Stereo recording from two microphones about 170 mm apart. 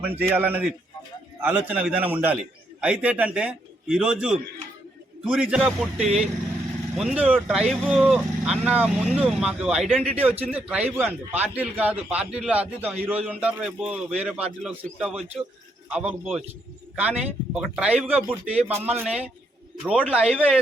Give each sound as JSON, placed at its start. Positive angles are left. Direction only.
{"t": 0.0, "sound": "a man's voice", "side_deg": -10}